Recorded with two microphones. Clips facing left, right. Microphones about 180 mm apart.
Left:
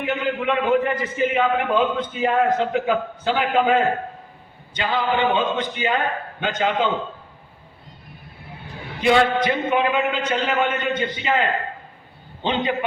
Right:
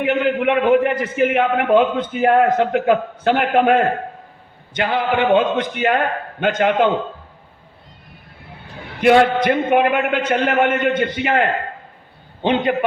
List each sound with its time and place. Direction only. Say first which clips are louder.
0.0 s a man's voice: right 6 dB; 65° right (ahead or behind)
9.0 s a man's voice: right 4 dB; 60° right (ahead or behind)